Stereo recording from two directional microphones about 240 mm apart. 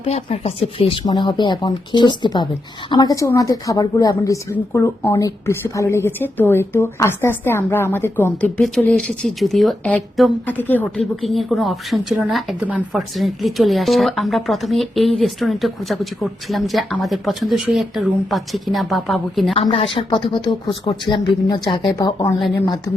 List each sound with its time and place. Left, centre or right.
0.0 s a woman's voice: left; by 19.5 s centre
19.5 s speech: left